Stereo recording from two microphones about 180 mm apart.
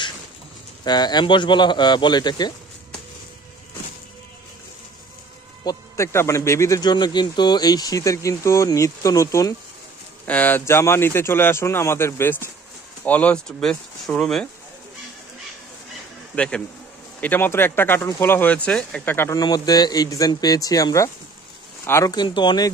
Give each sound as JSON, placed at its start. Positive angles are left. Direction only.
{"t": 0.8, "sound": "speech", "side_deg": 25}
{"t": 5.7, "sound": "speech", "side_deg": 15}
{"t": 16.3, "sound": "speech", "side_deg": 5}